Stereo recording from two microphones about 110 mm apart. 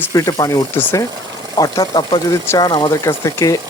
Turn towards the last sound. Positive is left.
turn(degrees=30)  # may be behind; listen again after turning